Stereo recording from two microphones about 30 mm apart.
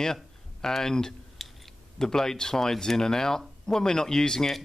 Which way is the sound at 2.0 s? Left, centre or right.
Centre.